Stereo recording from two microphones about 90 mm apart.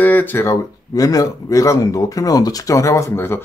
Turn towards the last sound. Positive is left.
turn(degrees=25)  # may be behind; listen again after turning